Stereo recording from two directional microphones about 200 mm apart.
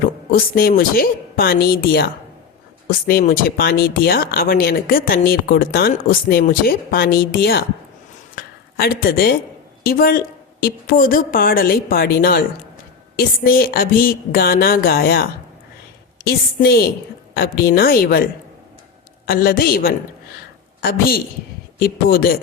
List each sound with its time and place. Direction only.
0.0 s speech: 45° left (ahead or behind)
8.4 s a sound: 50° left (ahead or behind)
9.8 s speech: 45° left (ahead or behind)